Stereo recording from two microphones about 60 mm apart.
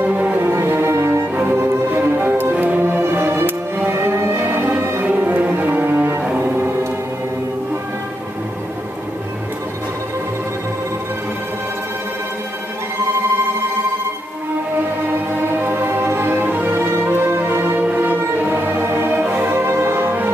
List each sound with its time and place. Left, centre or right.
0.1 s music: right
0.9 s music: right
1.5 s music: right
2.8 s music: right
5.0 s cello: right
6.4 s music: right
15.4 s music: right
17.7 s music: right